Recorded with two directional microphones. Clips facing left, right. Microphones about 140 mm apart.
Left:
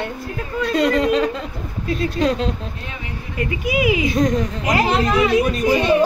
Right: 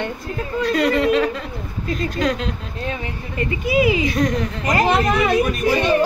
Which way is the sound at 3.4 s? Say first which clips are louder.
Right 2 dB; 5° left (ahead or behind).